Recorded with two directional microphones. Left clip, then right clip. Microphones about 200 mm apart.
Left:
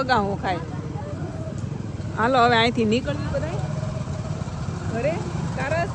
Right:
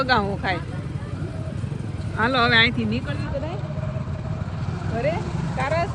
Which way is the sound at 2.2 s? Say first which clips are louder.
Even; 15° left (ahead or behind).